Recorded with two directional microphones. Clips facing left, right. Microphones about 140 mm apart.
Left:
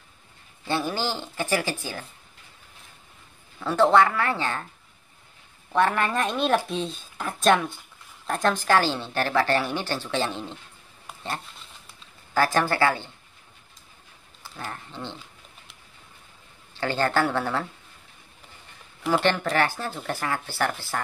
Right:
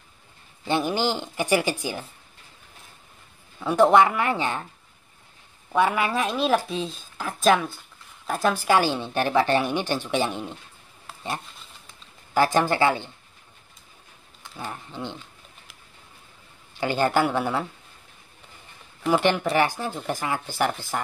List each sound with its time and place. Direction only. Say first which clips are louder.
0.7 s a woman's voice: right 3 dB; 15° right (ahead or behind)
3.5 s a woman's voice: right 2 dB; 15° right (ahead or behind)
5.7 s a woman's voice: right 1 dB; 10° right (ahead or behind)
12.4 s speech: right 2 dB; 20° right (ahead or behind)
14.6 s a woman's voice: right 2 dB; 15° right (ahead or behind)
16.7 s a woman's voice: right 2 dB; 15° right (ahead or behind)
19.0 s a woman's voice: right 2 dB; 15° right (ahead or behind)